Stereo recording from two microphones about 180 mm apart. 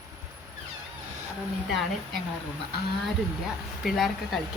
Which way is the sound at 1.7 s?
Centre (ahead or behind).